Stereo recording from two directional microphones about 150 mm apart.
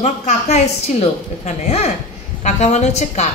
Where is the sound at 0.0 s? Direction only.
50° left (ahead or behind).